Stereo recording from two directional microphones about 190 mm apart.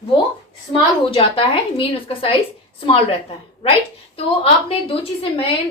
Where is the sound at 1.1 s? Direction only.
30° left (ahead or behind).